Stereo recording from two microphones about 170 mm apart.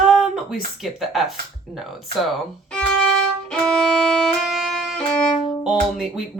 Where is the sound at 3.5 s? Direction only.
5° left (ahead or behind).